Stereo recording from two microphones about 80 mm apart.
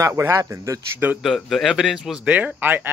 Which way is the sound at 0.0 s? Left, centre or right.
Right.